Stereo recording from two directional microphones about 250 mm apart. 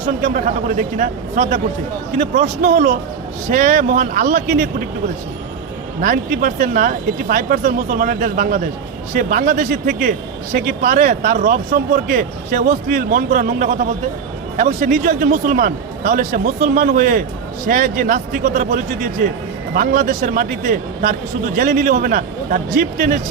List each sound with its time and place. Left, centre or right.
0.2 s a man's voice: right
6.0 s a man's voice: right